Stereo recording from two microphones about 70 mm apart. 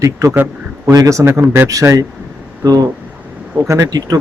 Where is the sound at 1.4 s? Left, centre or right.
Right.